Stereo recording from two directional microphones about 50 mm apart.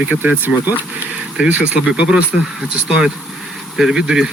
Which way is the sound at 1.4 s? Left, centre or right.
Right.